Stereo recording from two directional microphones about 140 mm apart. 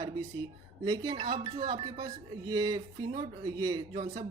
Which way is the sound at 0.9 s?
30° right (ahead or behind).